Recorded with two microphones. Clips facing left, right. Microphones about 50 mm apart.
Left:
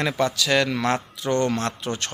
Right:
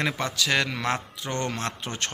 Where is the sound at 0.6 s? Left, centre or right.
Centre.